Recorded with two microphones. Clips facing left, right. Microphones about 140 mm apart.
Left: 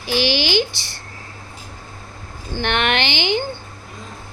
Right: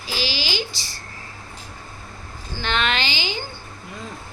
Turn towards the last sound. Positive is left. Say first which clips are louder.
# left 6 dB
turn(degrees=65)  # may be behind; listen again after turning